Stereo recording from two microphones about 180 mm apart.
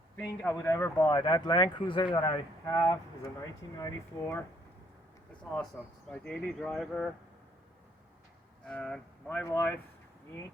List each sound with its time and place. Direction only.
0.2 s speech: 15° left (ahead or behind)
8.6 s speech: 5° left (ahead or behind)